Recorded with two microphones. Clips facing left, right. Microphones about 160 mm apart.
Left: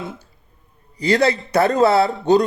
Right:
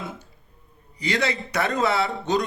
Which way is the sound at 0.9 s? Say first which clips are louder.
Left 8 dB; 35° left (ahead or behind).